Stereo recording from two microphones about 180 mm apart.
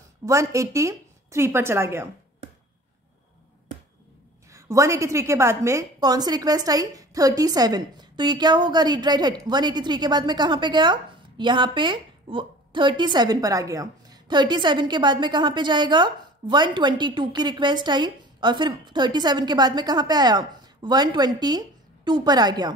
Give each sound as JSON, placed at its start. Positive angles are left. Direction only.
{"t": 0.2, "sound": "a woman's voice", "side_deg": -15}
{"t": 4.5, "sound": "a woman's voice", "side_deg": -15}